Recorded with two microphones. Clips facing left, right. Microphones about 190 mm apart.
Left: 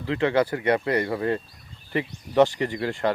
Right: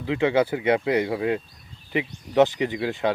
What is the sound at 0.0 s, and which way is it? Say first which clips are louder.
Speech: right 1 dB; 15° right (ahead or behind).